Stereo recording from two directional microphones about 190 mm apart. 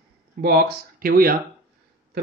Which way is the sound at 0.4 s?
50° right (ahead or behind).